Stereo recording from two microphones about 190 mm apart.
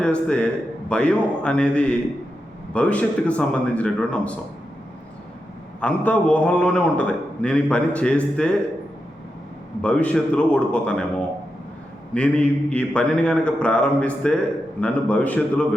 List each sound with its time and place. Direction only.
0.0 s a man's voice: 5° left (ahead or behind)
5.8 s a man's voice: 5° left (ahead or behind)
9.8 s a man's voice: 5° left (ahead or behind)